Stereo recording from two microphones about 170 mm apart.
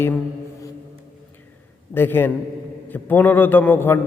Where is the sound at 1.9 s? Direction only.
15° left (ahead or behind).